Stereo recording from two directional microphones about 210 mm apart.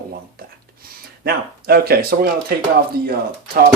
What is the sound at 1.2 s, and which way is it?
Speech, 45° right (ahead or behind).